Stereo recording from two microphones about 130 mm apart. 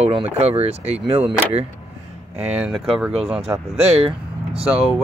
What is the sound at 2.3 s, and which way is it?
Speech, 10° right (ahead or behind).